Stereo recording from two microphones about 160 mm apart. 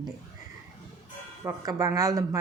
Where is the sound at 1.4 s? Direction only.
20° right (ahead or behind).